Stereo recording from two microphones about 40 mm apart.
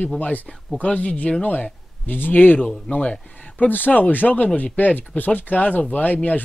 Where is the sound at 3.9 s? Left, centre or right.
Left.